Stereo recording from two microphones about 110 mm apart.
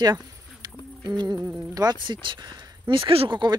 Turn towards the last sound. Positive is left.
turn(degrees=-50)  # may be behind; listen again after turning